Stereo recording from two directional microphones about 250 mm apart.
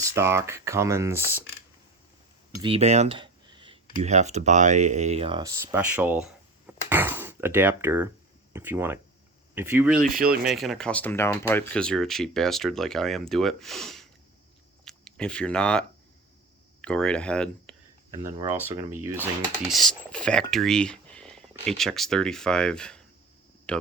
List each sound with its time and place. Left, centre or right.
0.0 s speech: centre
2.5 s a sound: centre
3.9 s speech: right; by 10.0 s centre
10.0 s speech: right
10.2 s speech: centre
16.8 s speech: centre
18.3 s speech: centre
19.7 s speech: centre